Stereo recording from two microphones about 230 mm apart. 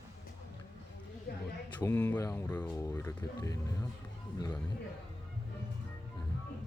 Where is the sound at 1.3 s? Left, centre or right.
Left.